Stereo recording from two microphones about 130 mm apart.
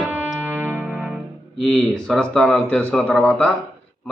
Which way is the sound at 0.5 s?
15° right (ahead or behind).